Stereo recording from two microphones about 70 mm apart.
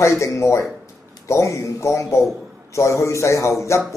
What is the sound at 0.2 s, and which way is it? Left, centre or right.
Speech, left.